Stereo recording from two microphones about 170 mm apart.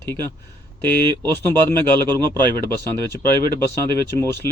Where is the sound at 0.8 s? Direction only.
25° right (ahead or behind).